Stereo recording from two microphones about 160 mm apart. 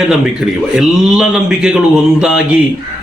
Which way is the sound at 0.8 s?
5° right (ahead or behind).